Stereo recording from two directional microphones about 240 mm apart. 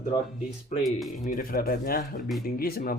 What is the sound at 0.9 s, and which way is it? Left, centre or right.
Speech, centre.